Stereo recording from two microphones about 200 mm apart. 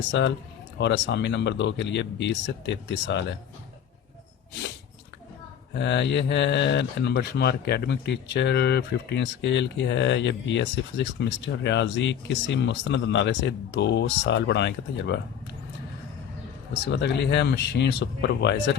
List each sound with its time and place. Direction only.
0.1 s speech: 60° left (ahead or behind)
5.7 s speech: 60° left (ahead or behind)
16.8 s speech: 55° left (ahead or behind)